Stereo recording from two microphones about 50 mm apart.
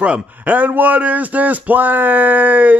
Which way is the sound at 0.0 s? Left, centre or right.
Right.